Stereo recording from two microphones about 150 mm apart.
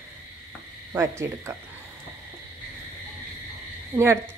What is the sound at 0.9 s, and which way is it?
Speech, 20° right (ahead or behind).